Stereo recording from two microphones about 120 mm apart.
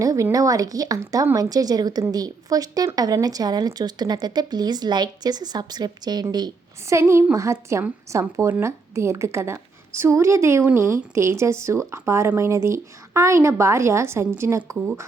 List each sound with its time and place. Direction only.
0.0 s a woman's voice: 25° right (ahead or behind)